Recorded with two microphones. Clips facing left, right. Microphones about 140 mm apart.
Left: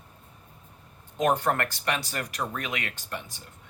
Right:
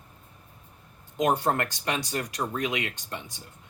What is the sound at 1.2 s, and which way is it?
Speech, 20° right (ahead or behind).